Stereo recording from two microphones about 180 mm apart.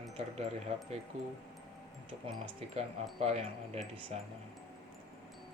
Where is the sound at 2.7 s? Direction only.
35° right (ahead or behind).